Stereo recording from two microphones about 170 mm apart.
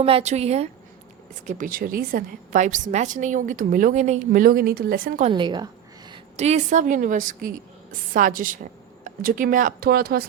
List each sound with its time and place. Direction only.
0.0 s a woman's voice: 40° right (ahead or behind)
1.5 s a woman's voice: 50° right (ahead or behind)
5.3 s a woman's voice: 25° right (ahead or behind)
6.3 s a woman's voice: 40° right (ahead or behind); by 10.2 s 60° right (ahead or behind)